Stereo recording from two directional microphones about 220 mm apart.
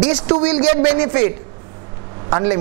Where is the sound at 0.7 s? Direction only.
15° right (ahead or behind).